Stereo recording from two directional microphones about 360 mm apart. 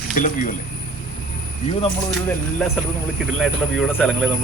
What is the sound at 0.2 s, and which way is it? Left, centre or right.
Speech, left.